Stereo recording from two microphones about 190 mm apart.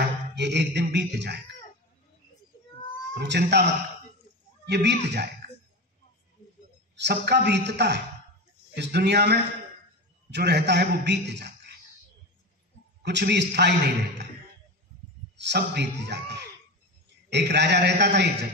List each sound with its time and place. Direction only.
0.0 s music: 65° right (ahead or behind)
3.2 s a man's voice: 65° right (ahead or behind)
4.6 s a man's voice: 65° right (ahead or behind)
7.0 s a man's voice: 65° right (ahead or behind)
13.0 s a man's voice: 65° right (ahead or behind)
15.3 s a man's voice: 65° right (ahead or behind)